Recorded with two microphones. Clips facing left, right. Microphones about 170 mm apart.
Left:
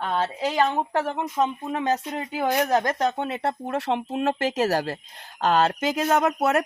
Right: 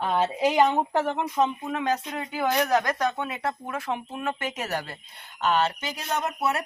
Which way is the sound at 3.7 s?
75° left (ahead or behind).